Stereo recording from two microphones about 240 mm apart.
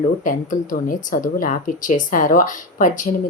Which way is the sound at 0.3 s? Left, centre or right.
Left.